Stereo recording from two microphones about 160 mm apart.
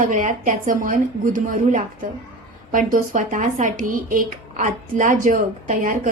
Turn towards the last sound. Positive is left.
turn(degrees=-55)  # may be behind; listen again after turning